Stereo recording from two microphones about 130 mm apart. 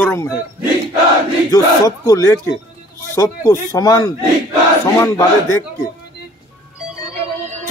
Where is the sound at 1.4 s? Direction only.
25° left (ahead or behind).